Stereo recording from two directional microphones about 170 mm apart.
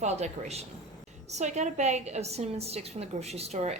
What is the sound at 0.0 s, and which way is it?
A woman's voice, 40° right (ahead or behind).